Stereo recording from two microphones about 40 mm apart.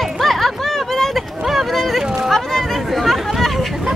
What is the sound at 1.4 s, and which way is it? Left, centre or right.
Speech, centre.